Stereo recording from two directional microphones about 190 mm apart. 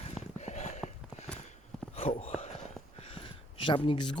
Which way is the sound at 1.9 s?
30° left (ahead or behind).